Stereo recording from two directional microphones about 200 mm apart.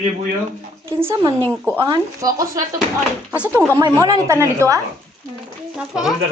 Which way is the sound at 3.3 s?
5° right (ahead or behind).